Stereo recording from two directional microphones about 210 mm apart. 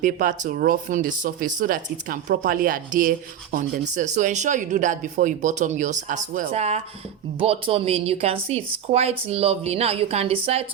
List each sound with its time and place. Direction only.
0.0 s speech: 35° right (ahead or behind)